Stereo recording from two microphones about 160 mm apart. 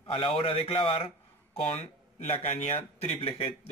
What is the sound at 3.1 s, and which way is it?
Speech, 30° left (ahead or behind).